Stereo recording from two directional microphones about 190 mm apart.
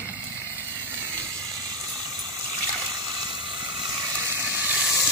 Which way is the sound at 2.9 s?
25° right (ahead or behind).